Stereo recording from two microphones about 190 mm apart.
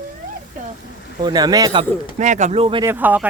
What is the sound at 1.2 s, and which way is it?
Speech, 20° right (ahead or behind).